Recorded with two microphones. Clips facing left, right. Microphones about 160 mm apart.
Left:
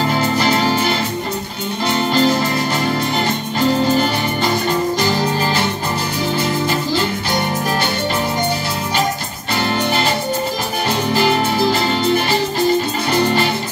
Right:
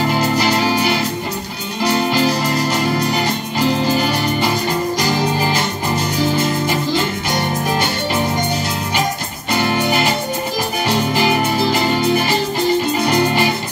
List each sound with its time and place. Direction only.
0.1 s music: 5° right (ahead or behind)
2.0 s music: 10° right (ahead or behind)
4.9 s music: 15° right (ahead or behind)
9.7 s music: 10° right (ahead or behind)